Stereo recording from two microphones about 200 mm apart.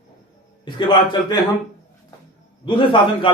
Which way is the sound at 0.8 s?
20° left (ahead or behind).